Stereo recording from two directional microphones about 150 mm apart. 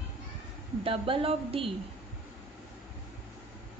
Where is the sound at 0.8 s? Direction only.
35° right (ahead or behind).